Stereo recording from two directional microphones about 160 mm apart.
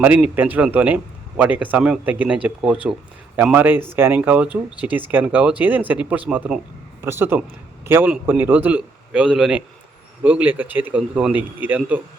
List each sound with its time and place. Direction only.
0.0 s speech: 10° right (ahead or behind)